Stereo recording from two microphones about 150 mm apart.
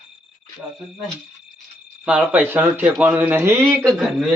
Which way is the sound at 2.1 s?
10° right (ahead or behind).